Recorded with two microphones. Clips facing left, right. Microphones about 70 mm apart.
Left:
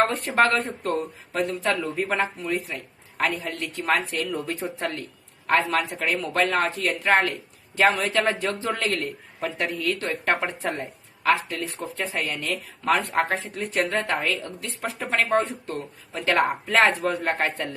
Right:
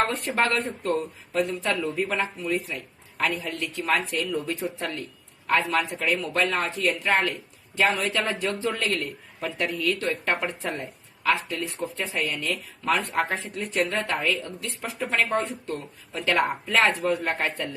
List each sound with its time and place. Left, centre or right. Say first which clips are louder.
0.3 s speech: left 4 dB; left
5.7 s speech: even; left
13.7 s speech: left 1 dB; left